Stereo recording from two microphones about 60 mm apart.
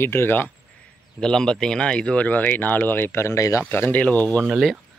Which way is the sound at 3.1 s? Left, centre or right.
Left.